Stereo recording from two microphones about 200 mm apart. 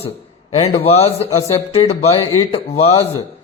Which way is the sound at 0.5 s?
30° left (ahead or behind).